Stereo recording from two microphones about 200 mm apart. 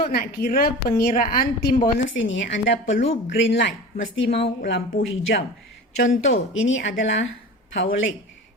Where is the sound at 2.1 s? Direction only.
65° left (ahead or behind).